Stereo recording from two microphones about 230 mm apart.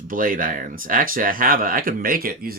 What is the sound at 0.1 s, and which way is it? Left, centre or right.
Speech, right.